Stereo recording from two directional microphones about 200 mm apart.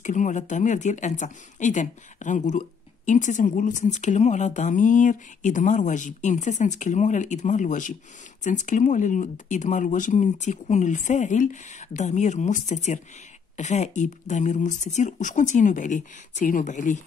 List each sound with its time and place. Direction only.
0.0 s a woman's voice: 40° left (ahead or behind)